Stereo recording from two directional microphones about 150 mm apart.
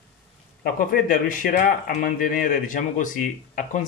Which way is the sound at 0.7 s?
70° left (ahead or behind).